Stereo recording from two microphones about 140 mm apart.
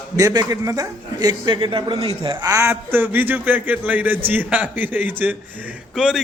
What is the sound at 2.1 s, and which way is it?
A man's voice, 30° right (ahead or behind).